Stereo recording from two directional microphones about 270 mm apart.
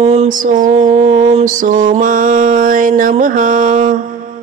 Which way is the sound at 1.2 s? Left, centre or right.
Right.